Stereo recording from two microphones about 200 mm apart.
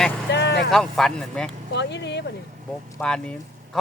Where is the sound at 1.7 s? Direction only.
60° left (ahead or behind).